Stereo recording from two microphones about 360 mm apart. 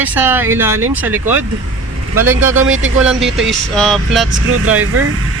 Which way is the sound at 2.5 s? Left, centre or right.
Right.